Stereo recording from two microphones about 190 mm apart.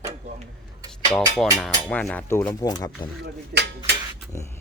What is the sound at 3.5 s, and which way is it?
Cutlery, 55° right (ahead or behind).